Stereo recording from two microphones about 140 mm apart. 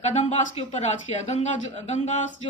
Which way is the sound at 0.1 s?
50° left (ahead or behind).